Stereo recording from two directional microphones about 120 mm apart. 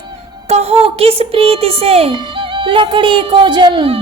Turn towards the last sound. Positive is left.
turn(degrees=-40)  # may be behind; listen again after turning